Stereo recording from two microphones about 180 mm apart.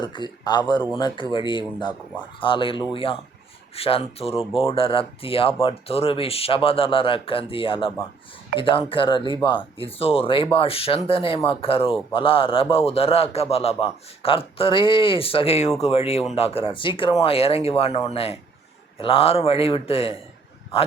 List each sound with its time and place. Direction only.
0.0 s speech: 25° left (ahead or behind)